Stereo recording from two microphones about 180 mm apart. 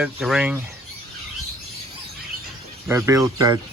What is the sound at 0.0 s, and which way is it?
Speech, centre (ahead or behind).